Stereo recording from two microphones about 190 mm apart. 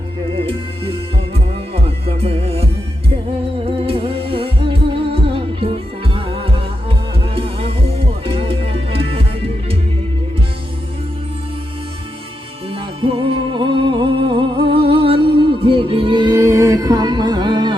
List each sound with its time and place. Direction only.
1.7 s music: 30° right (ahead or behind)
3.7 s music: 30° right (ahead or behind)
12.7 s music: 30° right (ahead or behind)